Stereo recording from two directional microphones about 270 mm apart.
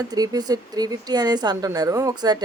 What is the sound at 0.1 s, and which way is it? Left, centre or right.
Speech, centre.